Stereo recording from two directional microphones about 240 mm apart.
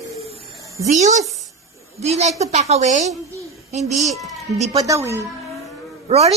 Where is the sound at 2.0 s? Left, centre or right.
Right.